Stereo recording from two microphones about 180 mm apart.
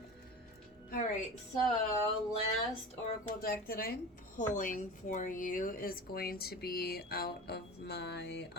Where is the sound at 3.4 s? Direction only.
55° left (ahead or behind).